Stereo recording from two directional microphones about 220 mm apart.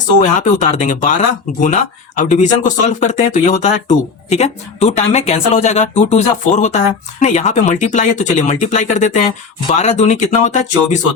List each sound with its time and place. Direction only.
0.2 s speech: 35° left (ahead or behind)